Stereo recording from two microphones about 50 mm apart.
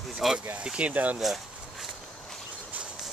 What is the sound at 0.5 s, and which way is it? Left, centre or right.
Speech, right.